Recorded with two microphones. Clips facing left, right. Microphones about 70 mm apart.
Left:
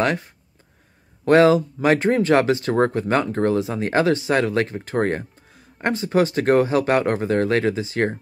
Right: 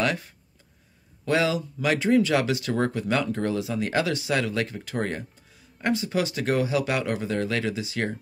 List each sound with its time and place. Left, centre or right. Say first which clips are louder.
1.2 s speech: left 10 dB; left